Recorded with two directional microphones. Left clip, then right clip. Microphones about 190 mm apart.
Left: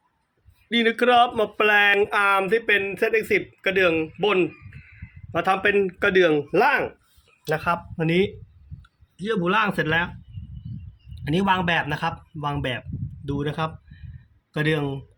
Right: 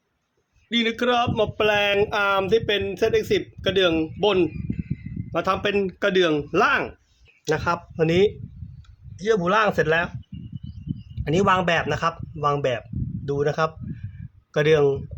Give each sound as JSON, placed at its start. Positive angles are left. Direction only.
{"t": 0.7, "sound": "speech", "side_deg": 5}
{"t": 7.4, "sound": "speech", "side_deg": -25}
{"t": 11.2, "sound": "speech", "side_deg": -20}